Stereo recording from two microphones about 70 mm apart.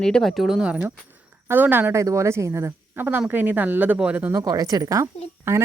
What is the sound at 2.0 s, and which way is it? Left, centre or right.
Speech, right.